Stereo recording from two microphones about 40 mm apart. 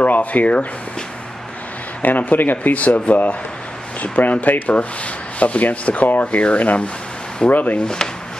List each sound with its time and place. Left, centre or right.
0.0 s speech: left
2.0 s speech: left
6.2 s speech: left
7.4 s speech: centre